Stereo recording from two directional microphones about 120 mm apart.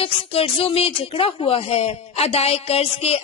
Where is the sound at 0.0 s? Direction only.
55° left (ahead or behind).